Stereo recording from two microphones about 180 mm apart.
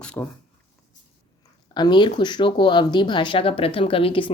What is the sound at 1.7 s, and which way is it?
Speech, 25° left (ahead or behind).